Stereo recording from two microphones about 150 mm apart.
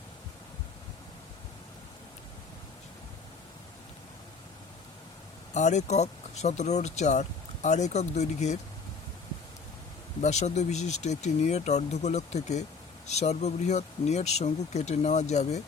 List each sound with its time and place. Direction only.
5.5 s speech: 50° left (ahead or behind)
10.2 s speech: 50° left (ahead or behind)